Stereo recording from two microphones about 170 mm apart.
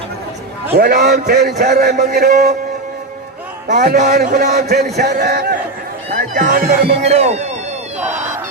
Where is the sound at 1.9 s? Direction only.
45° right (ahead or behind).